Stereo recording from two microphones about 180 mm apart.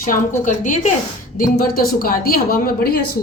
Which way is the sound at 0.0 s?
45° left (ahead or behind).